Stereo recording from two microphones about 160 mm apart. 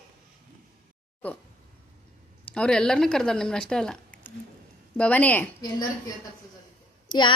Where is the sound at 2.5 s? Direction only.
5° left (ahead or behind).